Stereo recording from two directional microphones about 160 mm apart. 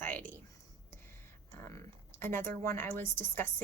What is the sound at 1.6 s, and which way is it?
A woman's voice, 15° left (ahead or behind).